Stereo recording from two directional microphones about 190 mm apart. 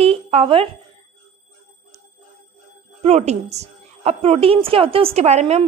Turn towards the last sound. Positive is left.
turn(degrees=-35)  # may be behind; listen again after turning